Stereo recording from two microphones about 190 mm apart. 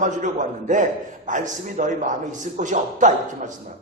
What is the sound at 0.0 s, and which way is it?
A man's voice, 40° right (ahead or behind).